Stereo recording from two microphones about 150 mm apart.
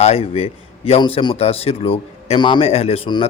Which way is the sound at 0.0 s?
40° left (ahead or behind).